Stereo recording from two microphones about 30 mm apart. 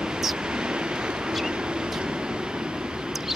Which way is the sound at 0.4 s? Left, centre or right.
Right.